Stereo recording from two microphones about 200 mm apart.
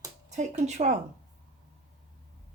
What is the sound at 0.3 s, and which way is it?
Speech, 35° right (ahead or behind).